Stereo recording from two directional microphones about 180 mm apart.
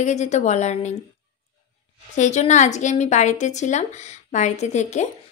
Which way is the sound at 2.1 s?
40° left (ahead or behind).